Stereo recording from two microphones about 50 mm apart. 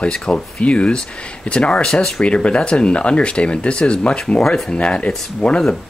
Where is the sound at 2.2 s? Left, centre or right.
Left.